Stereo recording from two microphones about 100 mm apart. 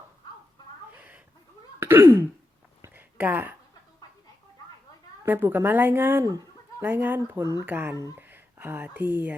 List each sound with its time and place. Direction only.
1.8 s throat clearing: 25° right (ahead or behind)
2.8 s a sound: 20° right (ahead or behind)
5.2 s a woman's voice: 20° right (ahead or behind)